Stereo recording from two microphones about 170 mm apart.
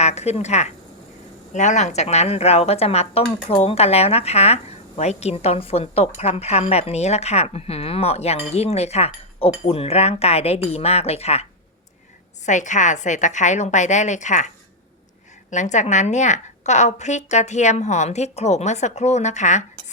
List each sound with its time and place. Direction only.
0.0 s speech: 40° left (ahead or behind)
12.5 s a woman's voice: 45° left (ahead or behind)